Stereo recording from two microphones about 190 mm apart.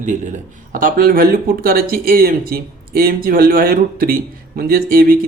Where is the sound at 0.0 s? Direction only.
40° right (ahead or behind).